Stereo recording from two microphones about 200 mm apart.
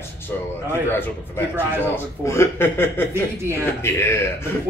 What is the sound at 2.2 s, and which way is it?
A man's voice, 15° left (ahead or behind).